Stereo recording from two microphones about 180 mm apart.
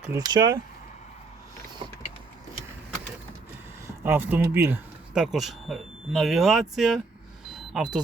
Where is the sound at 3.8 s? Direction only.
10° right (ahead or behind).